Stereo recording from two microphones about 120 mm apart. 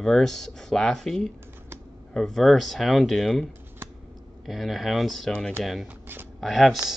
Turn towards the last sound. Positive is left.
turn(degrees=0)  # may be behind; listen again after turning